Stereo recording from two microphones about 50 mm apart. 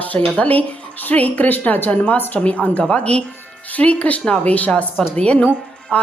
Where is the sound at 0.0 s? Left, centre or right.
Left.